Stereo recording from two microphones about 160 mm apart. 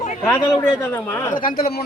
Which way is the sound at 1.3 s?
35° left (ahead or behind).